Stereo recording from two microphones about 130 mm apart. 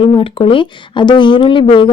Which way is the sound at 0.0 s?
45° left (ahead or behind).